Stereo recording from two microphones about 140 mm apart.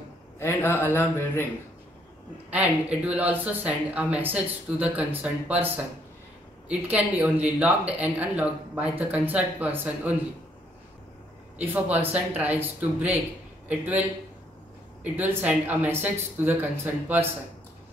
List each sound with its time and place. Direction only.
0.4 s a man's voice: 15° left (ahead or behind)
2.5 s speech: 10° right (ahead or behind)
6.7 s speech: 10° right (ahead or behind)
11.5 s speech: 10° right (ahead or behind)
15.1 s speech: 15° right (ahead or behind)